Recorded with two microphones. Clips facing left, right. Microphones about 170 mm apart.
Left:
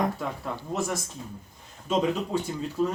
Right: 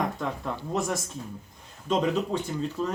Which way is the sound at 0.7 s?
Centre (ahead or behind).